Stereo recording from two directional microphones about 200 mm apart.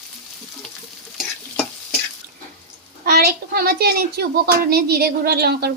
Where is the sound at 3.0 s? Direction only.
50° right (ahead or behind).